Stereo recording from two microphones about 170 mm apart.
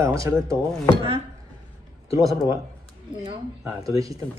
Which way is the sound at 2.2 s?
Centre (ahead or behind).